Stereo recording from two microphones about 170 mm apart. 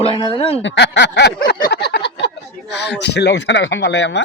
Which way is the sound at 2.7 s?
85° left.